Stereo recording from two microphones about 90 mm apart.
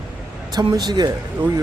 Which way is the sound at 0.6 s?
50° right (ahead or behind).